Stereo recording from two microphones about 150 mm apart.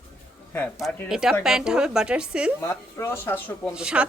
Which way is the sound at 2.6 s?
20° left (ahead or behind).